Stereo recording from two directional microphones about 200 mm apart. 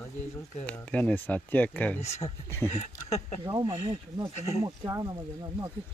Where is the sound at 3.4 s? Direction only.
20° right (ahead or behind).